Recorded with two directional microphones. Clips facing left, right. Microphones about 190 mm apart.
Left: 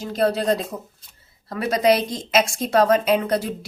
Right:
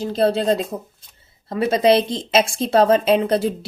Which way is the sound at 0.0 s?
30° right (ahead or behind).